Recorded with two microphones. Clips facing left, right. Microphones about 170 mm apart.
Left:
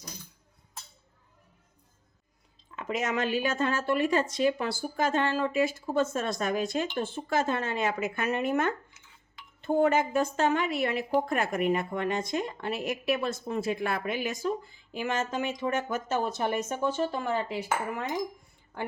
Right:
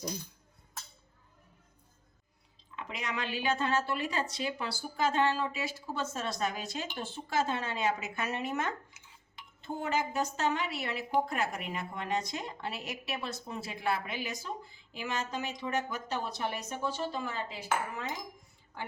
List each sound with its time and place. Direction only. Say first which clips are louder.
2.7 s a woman's voice: left 8 dB; 45° left (ahead or behind); by 18.0 s 60° left (ahead or behind)